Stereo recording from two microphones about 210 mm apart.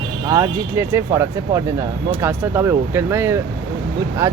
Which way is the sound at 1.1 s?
10° right (ahead or behind).